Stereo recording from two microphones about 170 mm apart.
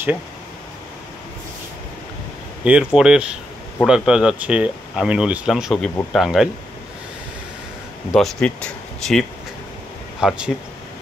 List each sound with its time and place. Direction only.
2.6 s speech: 5° right (ahead or behind)
8.1 s speech: centre (ahead or behind)
10.2 s speech: 5° right (ahead or behind)